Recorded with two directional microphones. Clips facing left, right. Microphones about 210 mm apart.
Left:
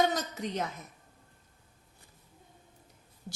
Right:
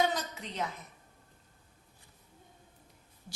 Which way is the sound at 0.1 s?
45° left (ahead or behind).